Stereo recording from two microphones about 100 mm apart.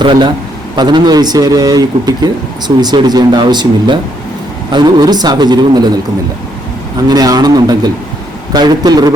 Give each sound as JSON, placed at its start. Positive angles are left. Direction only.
{"t": 0.0, "sound": "speech", "side_deg": -55}
{"t": 7.1, "sound": "a man's voice", "side_deg": -40}